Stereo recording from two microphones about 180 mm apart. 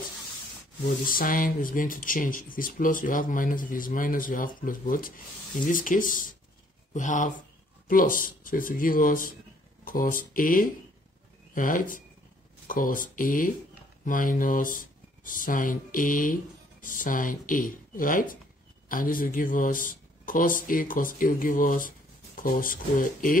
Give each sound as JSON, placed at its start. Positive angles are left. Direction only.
{"t": 1.0, "sound": "speech", "side_deg": 50}